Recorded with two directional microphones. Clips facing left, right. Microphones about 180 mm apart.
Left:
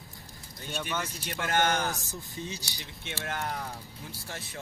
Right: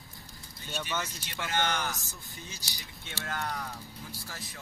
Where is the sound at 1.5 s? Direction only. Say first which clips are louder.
Left 4 dB; 45° left (ahead or behind).